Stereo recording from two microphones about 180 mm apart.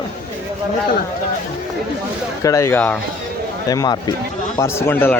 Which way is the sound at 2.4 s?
15° left (ahead or behind).